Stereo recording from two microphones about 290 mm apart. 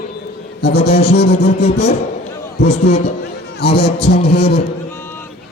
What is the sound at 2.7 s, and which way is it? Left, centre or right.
Speech, left.